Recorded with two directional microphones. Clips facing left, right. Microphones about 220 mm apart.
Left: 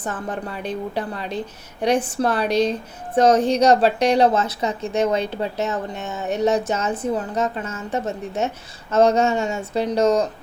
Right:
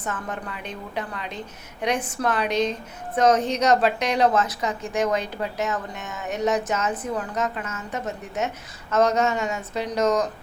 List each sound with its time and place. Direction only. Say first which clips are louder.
0.0 s a woman's voice: left 4 dB; 30° left (ahead or behind)